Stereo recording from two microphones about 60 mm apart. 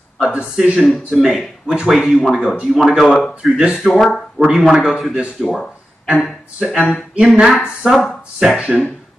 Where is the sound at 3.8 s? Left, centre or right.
Centre.